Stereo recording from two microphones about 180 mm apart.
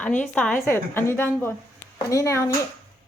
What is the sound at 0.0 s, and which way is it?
A woman's voice, 5° left (ahead or behind).